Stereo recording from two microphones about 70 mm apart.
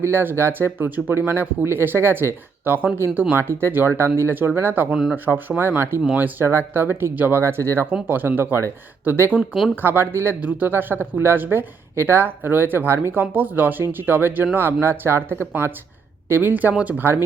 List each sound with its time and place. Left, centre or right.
0.0 s speech: right
6.1 s speech: right
17.0 s speech: right